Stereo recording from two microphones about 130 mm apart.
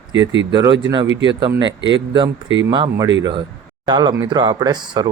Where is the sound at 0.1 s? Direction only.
35° right (ahead or behind).